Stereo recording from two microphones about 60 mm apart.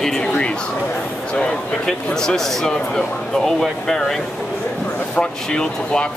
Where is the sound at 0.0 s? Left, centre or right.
Centre.